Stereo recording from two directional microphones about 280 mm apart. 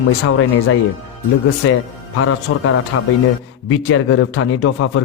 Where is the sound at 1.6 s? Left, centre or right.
Left.